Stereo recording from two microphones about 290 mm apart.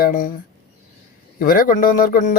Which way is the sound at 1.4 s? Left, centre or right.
Left.